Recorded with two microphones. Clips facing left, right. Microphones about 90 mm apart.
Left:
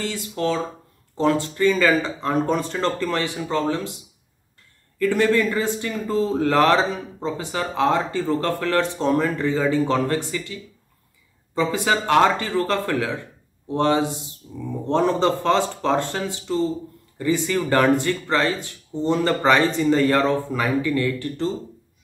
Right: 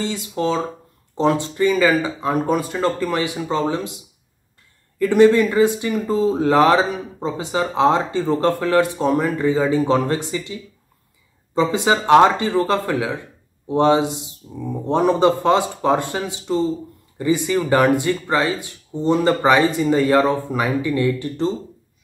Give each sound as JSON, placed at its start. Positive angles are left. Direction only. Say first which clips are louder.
{"t": 0.0, "sound": "speech", "louder": "right 2 dB", "side_deg": -20}
{"t": 4.9, "sound": "speech", "louder": "right 6 dB", "side_deg": -20}